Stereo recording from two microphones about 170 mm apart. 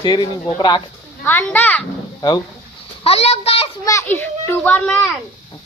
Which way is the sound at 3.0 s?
35° left (ahead or behind).